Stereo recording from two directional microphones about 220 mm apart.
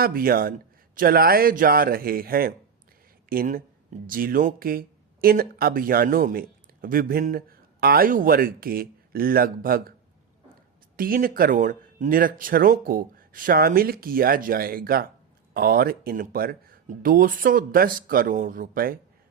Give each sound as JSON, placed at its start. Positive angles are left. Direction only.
{"t": 0.0, "sound": "speech", "side_deg": -40}
{"t": 10.9, "sound": "speech", "side_deg": -40}